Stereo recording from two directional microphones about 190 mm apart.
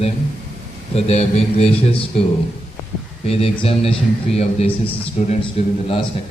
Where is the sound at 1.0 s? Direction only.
35° left (ahead or behind).